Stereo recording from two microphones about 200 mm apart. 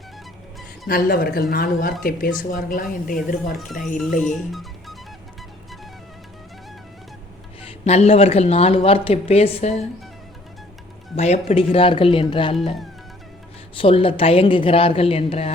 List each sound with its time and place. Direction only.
0.9 s speech: 50° left (ahead or behind)
3.7 s speech: centre (ahead or behind)
7.6 s speech: 30° left (ahead or behind)
11.2 s speech: 35° left (ahead or behind)
13.7 s speech: 25° left (ahead or behind)